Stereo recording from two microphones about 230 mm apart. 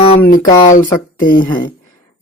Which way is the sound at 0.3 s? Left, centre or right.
Left.